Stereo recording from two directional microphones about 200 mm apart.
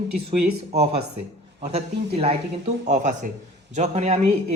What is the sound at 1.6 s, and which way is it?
Speech, 30° right (ahead or behind).